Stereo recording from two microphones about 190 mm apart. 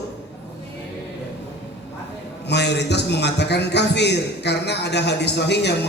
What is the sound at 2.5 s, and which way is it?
A man's voice, 60° left (ahead or behind).